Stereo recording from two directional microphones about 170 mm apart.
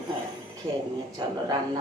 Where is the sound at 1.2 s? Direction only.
25° right (ahead or behind).